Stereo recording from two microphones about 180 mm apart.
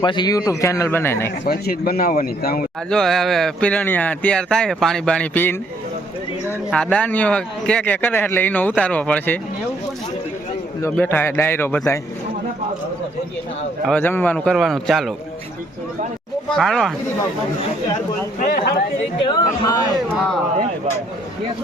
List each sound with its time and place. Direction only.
0.0 s a man's voice: 25° left (ahead or behind)
1.5 s speech: 55° left (ahead or behind)
2.9 s speech: centre (ahead or behind)
6.7 s a man's voice: 5° left (ahead or behind)
10.8 s a man's voice: 10° left (ahead or behind)
13.8 s speech: 10° left (ahead or behind)
16.5 s speech: 5° left (ahead or behind)
18.3 s speech: 50° left (ahead or behind)
19.2 s speech: 25° left (ahead or behind)